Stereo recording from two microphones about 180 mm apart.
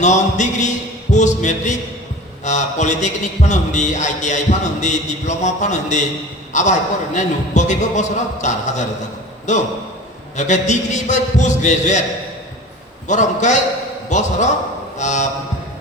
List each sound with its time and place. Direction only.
0.0 s a man's voice: 40° left (ahead or behind)
13.1 s a man's voice: 40° left (ahead or behind)
14.9 s a sound: 40° left (ahead or behind)